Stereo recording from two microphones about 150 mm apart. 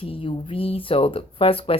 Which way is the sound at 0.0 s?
35° left (ahead or behind).